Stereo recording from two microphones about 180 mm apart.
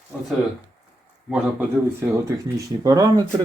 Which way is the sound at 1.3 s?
10° right (ahead or behind).